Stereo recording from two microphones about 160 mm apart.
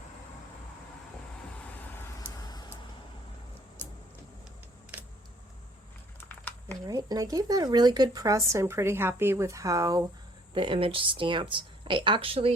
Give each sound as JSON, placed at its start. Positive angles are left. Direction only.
{"t": 1.6, "sound": "vehicle", "side_deg": 10}
{"t": 6.1, "sound": "typing", "side_deg": 10}
{"t": 6.8, "sound": "speech", "side_deg": -25}
{"t": 10.5, "sound": "speech", "side_deg": -35}